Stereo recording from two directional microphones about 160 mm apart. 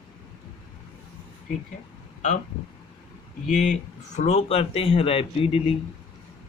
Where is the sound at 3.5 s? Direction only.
50° left (ahead or behind).